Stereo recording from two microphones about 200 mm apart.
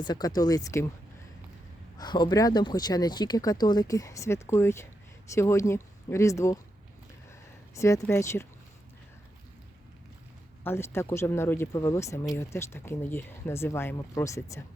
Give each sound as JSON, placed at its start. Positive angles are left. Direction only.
{"t": 0.0, "sound": "speech", "side_deg": 20}
{"t": 2.0, "sound": "speech", "side_deg": 20}
{"t": 7.8, "sound": "speech", "side_deg": 15}
{"t": 10.6, "sound": "speech", "side_deg": 10}